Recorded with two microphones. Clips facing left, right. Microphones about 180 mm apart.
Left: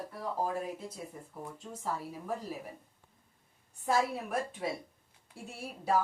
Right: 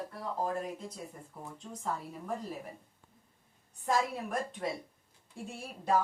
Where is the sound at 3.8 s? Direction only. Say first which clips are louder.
Left 1 dB; 5° left (ahead or behind).